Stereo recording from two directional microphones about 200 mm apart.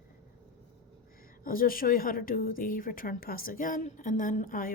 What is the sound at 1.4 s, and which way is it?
A woman's voice, 45° left (ahead or behind).